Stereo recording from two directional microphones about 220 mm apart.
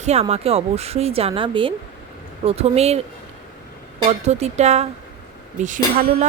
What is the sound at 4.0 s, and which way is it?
Speech, 30° right (ahead or behind).